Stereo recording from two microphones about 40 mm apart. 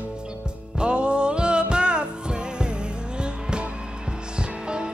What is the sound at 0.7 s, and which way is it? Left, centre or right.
Music, right.